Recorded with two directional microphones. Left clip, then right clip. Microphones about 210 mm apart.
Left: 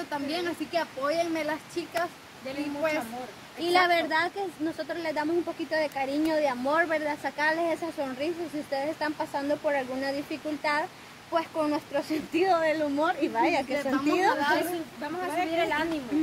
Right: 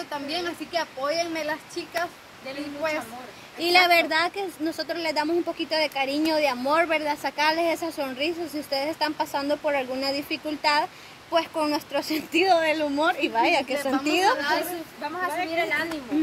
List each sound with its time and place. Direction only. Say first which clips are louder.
0.1 s a woman's voice: right 1 dB; 5° right (ahead or behind)
3.6 s a woman's voice: right 5 dB; 40° right (ahead or behind)
14.4 s a woman's voice: right 1 dB; 5° right (ahead or behind)